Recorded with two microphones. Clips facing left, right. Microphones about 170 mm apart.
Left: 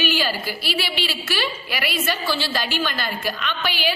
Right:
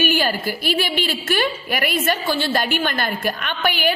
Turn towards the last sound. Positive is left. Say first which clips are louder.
# right 4 dB
turn(degrees=-50)  # may be behind; listen again after turning